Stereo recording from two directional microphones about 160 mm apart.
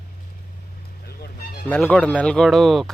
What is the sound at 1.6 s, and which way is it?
Speech, 10° left (ahead or behind).